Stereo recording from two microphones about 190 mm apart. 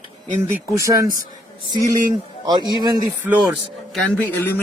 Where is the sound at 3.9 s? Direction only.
10° left (ahead or behind).